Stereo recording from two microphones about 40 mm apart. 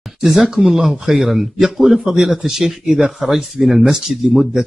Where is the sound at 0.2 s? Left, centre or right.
Centre.